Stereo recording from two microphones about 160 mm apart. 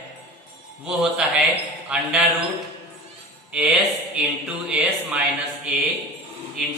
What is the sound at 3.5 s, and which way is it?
Speech, 5° right (ahead or behind).